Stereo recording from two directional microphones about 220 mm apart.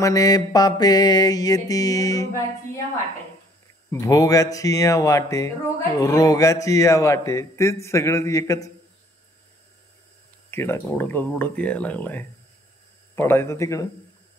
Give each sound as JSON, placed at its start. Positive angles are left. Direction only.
{"t": 0.0, "sound": "mantra", "side_deg": 15}
{"t": 3.9, "sound": "mantra", "side_deg": 15}
{"t": 10.5, "sound": "mantra", "side_deg": 10}